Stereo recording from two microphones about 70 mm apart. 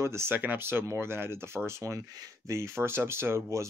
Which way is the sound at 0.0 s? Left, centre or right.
Right.